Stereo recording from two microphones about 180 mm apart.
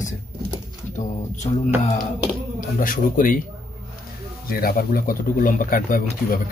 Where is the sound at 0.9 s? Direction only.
40° left (ahead or behind).